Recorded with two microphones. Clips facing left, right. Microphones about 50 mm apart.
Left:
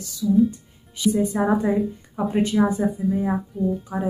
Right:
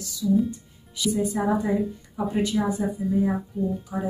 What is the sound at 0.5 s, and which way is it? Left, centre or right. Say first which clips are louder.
Speech: even; left.